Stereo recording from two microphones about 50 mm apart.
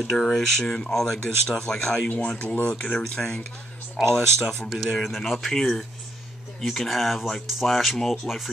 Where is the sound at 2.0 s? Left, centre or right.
Left.